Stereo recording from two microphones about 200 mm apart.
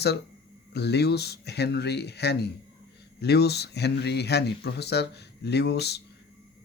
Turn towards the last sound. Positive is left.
turn(degrees=55)  # may be behind; listen again after turning